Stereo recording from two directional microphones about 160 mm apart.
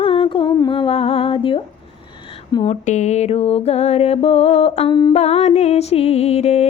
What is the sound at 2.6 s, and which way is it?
Music, 45° left (ahead or behind).